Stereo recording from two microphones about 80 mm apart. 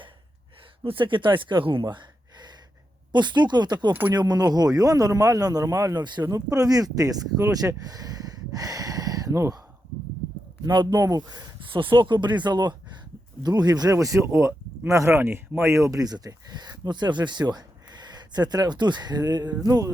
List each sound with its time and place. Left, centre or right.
0.9 s a man's voice: right
10.6 s a man's voice: right
10.8 s speech: right
13.9 s a man's voice: right